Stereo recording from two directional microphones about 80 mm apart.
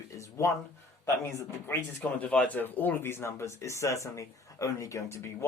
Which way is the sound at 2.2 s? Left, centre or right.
Centre.